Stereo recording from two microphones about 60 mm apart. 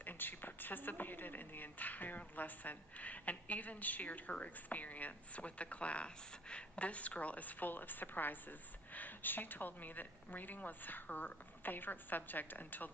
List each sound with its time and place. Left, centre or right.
0.0 s a woman's voice: left